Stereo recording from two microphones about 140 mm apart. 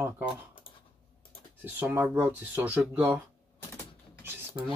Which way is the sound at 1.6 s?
15° right (ahead or behind).